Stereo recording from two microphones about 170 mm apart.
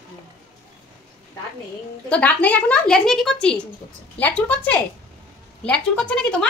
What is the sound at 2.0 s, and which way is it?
Speech, 10° left (ahead or behind).